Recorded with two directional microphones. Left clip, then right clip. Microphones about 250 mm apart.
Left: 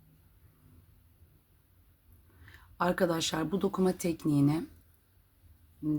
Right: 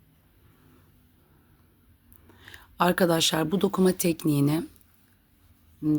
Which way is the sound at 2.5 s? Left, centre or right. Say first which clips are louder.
Right 6 dB; right.